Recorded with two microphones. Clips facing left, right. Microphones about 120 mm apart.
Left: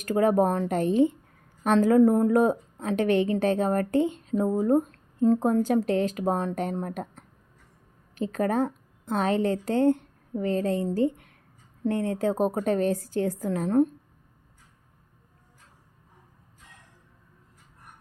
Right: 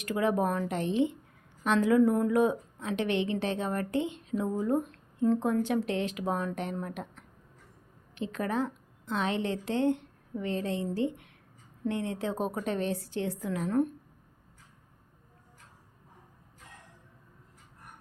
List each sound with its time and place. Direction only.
0.0 s a woman's voice: 40° left (ahead or behind)